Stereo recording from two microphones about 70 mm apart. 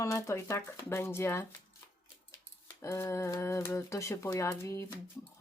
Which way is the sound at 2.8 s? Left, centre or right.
Left.